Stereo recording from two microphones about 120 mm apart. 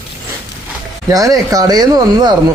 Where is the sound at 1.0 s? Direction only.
30° right (ahead or behind).